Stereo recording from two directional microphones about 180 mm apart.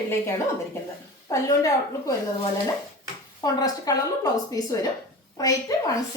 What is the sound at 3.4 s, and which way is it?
A woman's voice, 20° left (ahead or behind).